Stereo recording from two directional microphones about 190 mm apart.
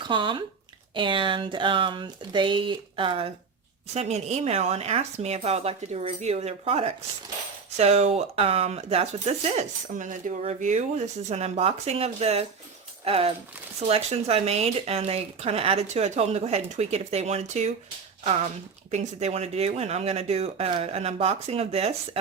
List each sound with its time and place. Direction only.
0.0 s speech: 25° right (ahead or behind)
18.9 s speech: 35° right (ahead or behind)